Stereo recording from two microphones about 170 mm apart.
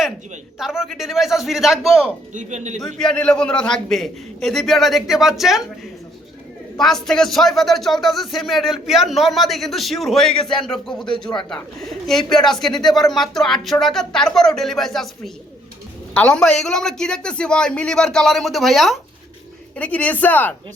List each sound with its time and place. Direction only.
0.6 s speech: centre (ahead or behind)
2.3 s speech: 45° right (ahead or behind)
2.8 s speech: 5° left (ahead or behind)
6.7 s speech: 5° left (ahead or behind)